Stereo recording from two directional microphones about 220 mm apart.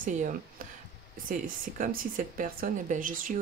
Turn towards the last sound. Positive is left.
turn(degrees=-35)  # may be behind; listen again after turning